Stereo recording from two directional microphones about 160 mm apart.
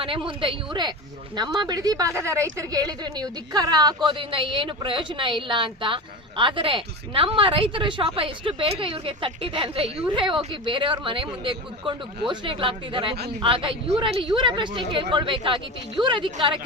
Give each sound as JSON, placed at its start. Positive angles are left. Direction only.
{"t": 0.0, "sound": "a woman's voice", "side_deg": -35}